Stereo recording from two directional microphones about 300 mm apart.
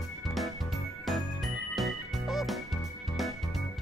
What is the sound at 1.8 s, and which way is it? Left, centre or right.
Music, centre.